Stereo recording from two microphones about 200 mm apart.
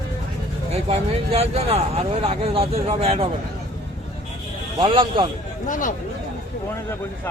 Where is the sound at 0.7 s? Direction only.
30° right (ahead or behind).